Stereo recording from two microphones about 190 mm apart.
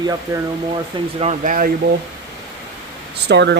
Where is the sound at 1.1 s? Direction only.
40° right (ahead or behind).